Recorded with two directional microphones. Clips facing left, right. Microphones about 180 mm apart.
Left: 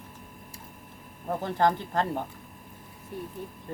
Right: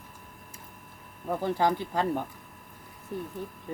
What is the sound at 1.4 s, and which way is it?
Speech, 10° right (ahead or behind).